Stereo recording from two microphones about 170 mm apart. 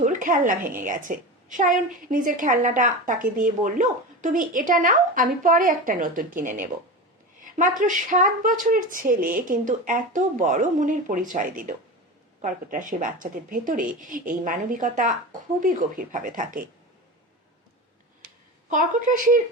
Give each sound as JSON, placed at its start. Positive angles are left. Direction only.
{"t": 0.0, "sound": "a woman's voice", "side_deg": -50}
{"t": 18.7, "sound": "a woman's voice", "side_deg": -50}